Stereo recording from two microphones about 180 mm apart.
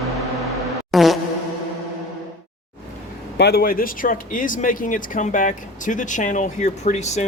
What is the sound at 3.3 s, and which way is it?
Speech, 60° left (ahead or behind).